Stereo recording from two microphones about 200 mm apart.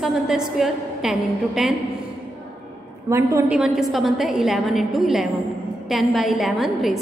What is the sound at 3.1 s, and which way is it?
Speech, 15° right (ahead or behind).